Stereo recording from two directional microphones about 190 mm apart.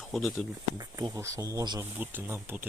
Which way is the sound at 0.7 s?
20° right (ahead or behind).